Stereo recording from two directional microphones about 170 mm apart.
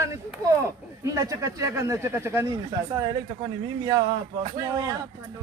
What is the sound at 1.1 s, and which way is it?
Speech, 20° right (ahead or behind).